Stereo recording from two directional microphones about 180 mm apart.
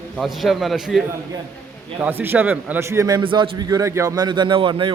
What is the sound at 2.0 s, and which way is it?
A man's voice, 10° right (ahead or behind).